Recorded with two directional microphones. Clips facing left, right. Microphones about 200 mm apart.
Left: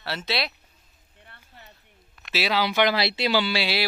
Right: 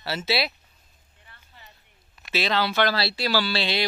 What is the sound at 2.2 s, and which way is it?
Speech, 5° left (ahead or behind).